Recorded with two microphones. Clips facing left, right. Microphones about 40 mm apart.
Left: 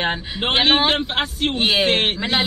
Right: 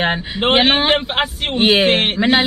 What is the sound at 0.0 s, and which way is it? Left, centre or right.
A man's voice, right.